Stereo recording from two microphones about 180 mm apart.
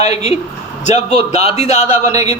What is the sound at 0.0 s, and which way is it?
Speech, 35° left (ahead or behind).